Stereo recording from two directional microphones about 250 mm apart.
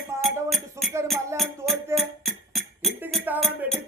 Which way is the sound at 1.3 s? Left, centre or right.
Centre.